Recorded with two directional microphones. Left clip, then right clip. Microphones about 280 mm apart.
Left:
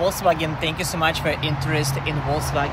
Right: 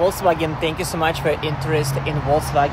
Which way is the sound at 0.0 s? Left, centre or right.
Centre.